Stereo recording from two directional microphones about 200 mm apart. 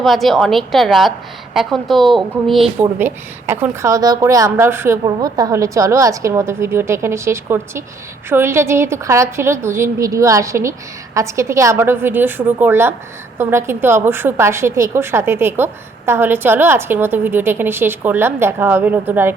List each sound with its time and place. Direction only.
0.0 s a woman's voice: centre (ahead or behind)
2.8 s a woman's voice: 10° right (ahead or behind)